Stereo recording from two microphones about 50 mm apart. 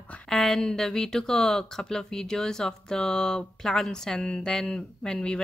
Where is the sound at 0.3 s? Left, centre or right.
Centre.